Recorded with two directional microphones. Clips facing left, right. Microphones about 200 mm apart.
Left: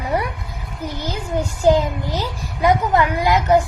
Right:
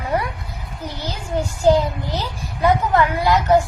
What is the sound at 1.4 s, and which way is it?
A child's voice, 15° left (ahead or behind).